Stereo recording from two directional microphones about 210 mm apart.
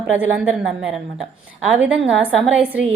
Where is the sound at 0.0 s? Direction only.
10° right (ahead or behind).